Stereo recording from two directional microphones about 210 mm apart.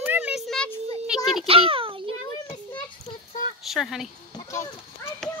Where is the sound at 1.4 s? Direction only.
25° right (ahead or behind).